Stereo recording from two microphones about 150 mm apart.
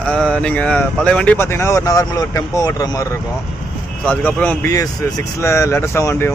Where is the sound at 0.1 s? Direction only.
5° left (ahead or behind); by 3.1 s 25° left (ahead or behind).